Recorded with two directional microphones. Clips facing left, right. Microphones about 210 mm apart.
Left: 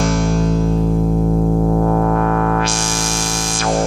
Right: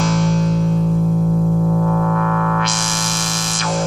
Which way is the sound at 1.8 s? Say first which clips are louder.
Left 3 dB; 40° left (ahead or behind).